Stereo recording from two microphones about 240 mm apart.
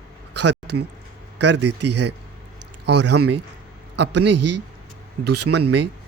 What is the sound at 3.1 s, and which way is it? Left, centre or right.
A man's voice, right.